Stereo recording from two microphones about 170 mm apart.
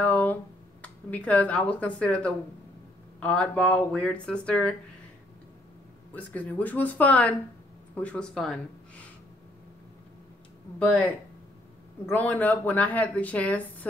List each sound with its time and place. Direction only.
0.0 s a sound: 10° left (ahead or behind)
0.8 s speech: 10° left (ahead or behind)
6.1 s speech: 10° left (ahead or behind)
12.1 s speech: 10° left (ahead or behind)